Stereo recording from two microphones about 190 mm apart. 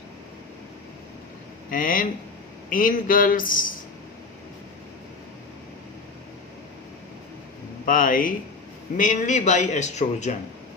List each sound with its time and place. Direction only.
1.7 s a man's voice: 45° left (ahead or behind)
7.9 s a man's voice: 45° left (ahead or behind)